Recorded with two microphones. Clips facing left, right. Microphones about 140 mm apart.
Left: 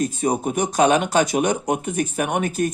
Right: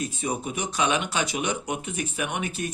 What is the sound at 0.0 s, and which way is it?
Speech, 45° left (ahead or behind).